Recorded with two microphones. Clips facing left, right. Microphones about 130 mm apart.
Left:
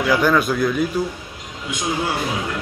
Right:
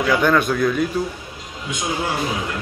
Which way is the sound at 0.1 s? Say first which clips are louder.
Even; 5° left (ahead or behind).